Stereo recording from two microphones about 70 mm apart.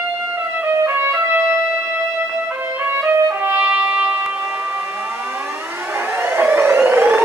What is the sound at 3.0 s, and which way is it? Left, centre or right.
Music, right.